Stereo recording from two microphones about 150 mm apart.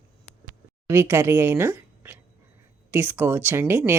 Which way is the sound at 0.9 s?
15° right (ahead or behind).